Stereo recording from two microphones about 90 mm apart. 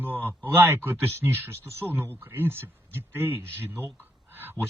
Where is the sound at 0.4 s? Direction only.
25° right (ahead or behind).